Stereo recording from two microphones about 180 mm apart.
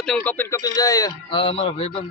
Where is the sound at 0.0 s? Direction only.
5° left (ahead or behind).